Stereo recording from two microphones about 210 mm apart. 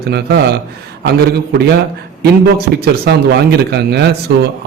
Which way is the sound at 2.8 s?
50° right (ahead or behind).